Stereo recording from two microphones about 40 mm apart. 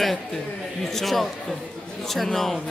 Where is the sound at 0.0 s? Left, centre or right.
Centre.